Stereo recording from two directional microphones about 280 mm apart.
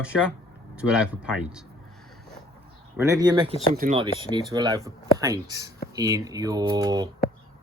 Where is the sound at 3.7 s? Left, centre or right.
Right.